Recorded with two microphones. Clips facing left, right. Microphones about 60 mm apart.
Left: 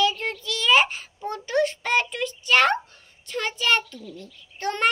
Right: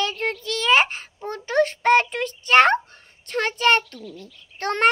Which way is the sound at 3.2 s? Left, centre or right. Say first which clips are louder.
Right 5 dB; right.